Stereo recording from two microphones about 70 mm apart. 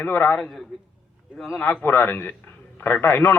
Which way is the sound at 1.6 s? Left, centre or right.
Left.